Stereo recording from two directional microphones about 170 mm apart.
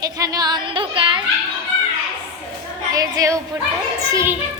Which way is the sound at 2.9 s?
20° right (ahead or behind).